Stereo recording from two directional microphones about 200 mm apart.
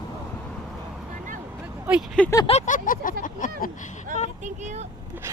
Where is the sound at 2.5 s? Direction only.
35° left (ahead or behind).